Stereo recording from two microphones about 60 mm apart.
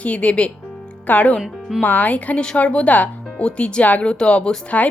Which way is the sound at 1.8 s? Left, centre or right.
Left.